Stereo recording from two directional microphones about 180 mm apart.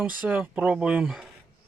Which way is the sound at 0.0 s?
5° right (ahead or behind).